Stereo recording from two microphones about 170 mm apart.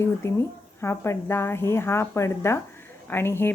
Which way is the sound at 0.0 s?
15° left (ahead or behind).